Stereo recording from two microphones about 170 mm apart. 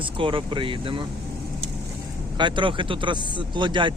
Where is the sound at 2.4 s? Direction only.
30° right (ahead or behind).